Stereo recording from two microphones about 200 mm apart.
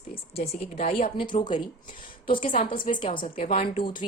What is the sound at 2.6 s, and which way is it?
Speech, 25° left (ahead or behind).